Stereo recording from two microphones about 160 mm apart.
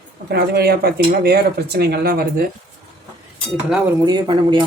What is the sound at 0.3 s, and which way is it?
Speech, 85° right.